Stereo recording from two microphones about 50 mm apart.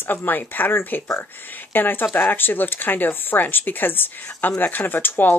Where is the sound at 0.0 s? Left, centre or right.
Left.